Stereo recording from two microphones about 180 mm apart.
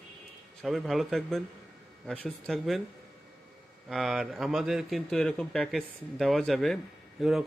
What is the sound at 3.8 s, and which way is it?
Speech, centre (ahead or behind).